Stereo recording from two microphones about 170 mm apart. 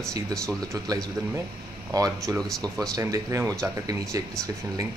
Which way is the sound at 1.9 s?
20° right (ahead or behind).